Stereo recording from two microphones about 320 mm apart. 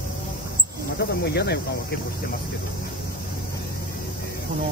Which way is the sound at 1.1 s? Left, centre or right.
Left.